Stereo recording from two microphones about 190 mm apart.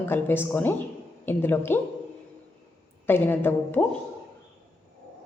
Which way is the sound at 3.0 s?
10° left (ahead or behind).